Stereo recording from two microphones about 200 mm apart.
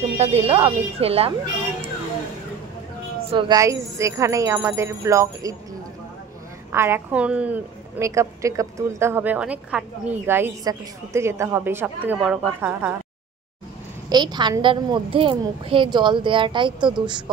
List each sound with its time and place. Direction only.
0.2 s a woman's voice: 30° right (ahead or behind)
3.3 s a woman's voice: 20° right (ahead or behind)
6.7 s a woman's voice: 10° right (ahead or behind)
14.0 s a woman's voice: 20° right (ahead or behind)